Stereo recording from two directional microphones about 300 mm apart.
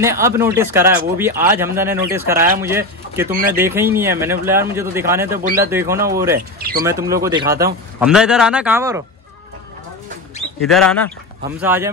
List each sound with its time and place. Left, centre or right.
0.0 s a man's voice: centre
5.4 s speech: right
5.7 s speech: centre
6.3 s speech: right
6.9 s speech: centre
10.6 s speech: centre